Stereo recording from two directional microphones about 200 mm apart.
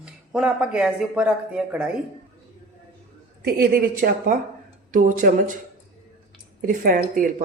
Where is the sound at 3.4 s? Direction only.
50° right (ahead or behind).